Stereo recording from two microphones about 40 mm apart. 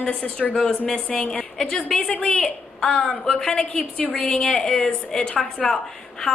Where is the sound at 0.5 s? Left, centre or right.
Centre.